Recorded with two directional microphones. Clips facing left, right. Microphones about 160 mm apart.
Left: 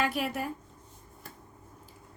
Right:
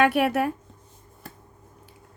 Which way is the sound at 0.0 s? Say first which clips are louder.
Right 10 dB; 65° right (ahead or behind).